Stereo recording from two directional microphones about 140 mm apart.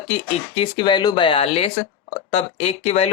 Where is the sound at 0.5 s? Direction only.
35° left (ahead or behind).